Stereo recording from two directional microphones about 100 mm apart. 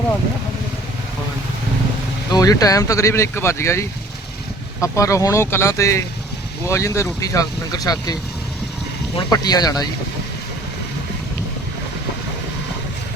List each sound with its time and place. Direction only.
2.3 s speech: 40° left (ahead or behind)
9.3 s speech: 40° left (ahead or behind)